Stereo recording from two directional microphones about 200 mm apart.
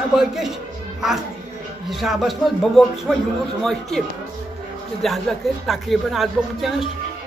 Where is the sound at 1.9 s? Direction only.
Centre (ahead or behind).